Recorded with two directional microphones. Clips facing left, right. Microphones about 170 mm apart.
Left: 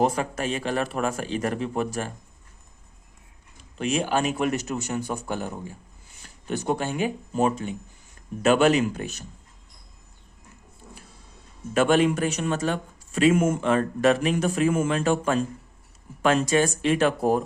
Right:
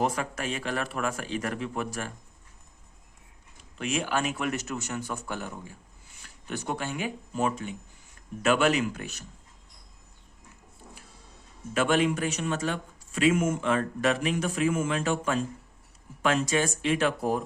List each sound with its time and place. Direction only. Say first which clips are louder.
0.0 s speech: left 5 dB; 30° left (ahead or behind)
3.8 s speech: left 5 dB; 30° left (ahead or behind)
4.8 s speech: left 5 dB; 15° left (ahead or behind)
6.2 s speech: left 7 dB; 25° left (ahead or behind)
11.7 s speech: left 5 dB; 40° left (ahead or behind)